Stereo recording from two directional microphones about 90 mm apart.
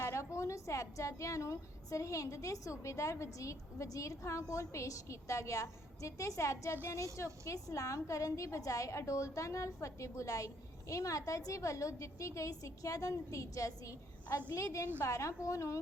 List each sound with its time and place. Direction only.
0.0 s a woman's voice: 30° left (ahead or behind)